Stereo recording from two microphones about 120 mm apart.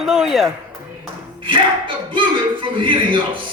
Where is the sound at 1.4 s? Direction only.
45° right (ahead or behind).